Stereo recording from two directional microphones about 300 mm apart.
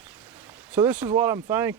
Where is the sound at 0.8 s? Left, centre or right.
Centre.